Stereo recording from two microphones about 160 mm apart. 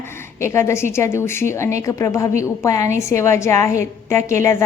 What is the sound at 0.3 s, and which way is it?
A woman's voice, 15° left (ahead or behind).